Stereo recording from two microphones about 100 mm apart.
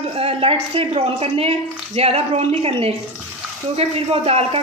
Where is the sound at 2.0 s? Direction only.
90° right.